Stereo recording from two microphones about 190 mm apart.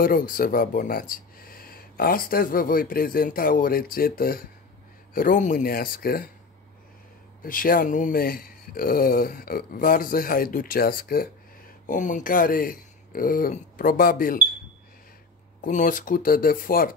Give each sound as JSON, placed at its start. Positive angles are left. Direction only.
{"t": 0.0, "sound": "speech", "side_deg": 50}
{"t": 7.4, "sound": "speech", "side_deg": 50}
{"t": 15.6, "sound": "speech", "side_deg": 45}